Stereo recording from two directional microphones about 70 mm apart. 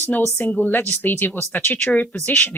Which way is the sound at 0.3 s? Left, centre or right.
Left.